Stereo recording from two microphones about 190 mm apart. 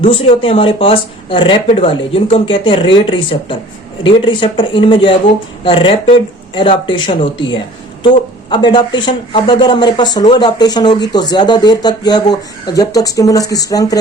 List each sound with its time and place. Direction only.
0.0 s speech: 30° left (ahead or behind)